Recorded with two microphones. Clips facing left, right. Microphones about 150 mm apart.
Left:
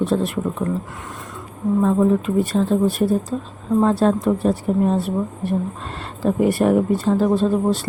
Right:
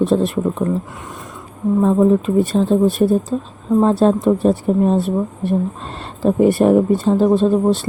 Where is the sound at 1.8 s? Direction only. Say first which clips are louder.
Right 4 dB; 25° right (ahead or behind).